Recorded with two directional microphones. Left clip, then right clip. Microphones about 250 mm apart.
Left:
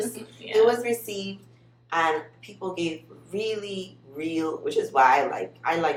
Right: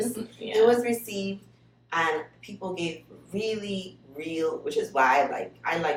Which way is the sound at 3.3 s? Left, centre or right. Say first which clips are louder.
Left 1 dB; centre.